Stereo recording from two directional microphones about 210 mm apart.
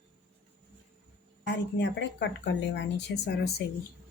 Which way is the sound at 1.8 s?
55° left (ahead or behind).